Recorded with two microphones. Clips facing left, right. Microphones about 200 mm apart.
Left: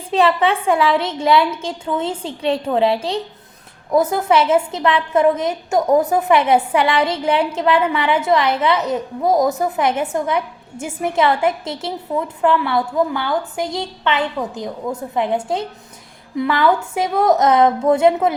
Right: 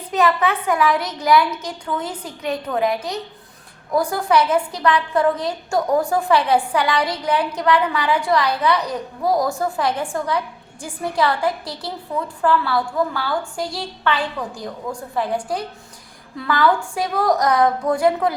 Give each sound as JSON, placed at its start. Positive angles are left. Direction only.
{"t": 0.1, "sound": "a woman's voice", "side_deg": 30}